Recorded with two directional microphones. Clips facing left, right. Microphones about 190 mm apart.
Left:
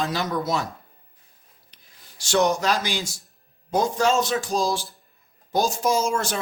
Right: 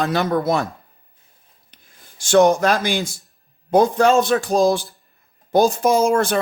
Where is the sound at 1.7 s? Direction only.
50° right (ahead or behind).